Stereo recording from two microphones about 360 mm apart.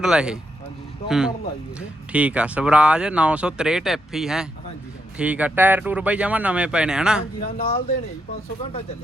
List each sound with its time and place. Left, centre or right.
0.0 s speech: centre
7.4 s speech: centre